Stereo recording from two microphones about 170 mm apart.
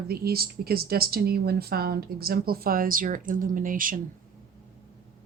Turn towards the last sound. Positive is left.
turn(degrees=-55)  # may be behind; listen again after turning